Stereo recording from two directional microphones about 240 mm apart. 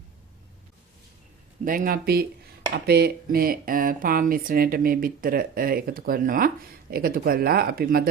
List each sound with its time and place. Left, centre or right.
1.6 s speech: right